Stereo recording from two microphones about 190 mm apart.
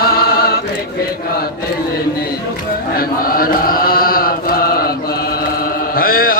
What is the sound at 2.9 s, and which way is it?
Chant, 50° left (ahead or behind).